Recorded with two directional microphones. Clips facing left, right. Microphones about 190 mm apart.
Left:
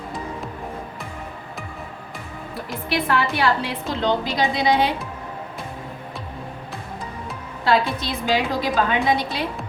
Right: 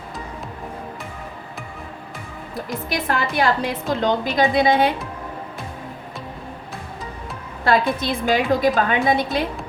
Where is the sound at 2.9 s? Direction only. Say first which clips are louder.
Left 3 dB; 45° right (ahead or behind).